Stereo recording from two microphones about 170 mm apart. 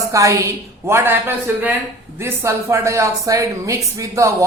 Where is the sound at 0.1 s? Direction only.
20° right (ahead or behind).